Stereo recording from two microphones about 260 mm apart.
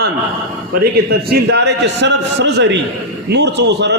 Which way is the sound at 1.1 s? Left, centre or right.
Right.